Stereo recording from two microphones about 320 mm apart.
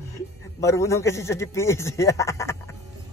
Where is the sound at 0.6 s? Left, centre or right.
Centre.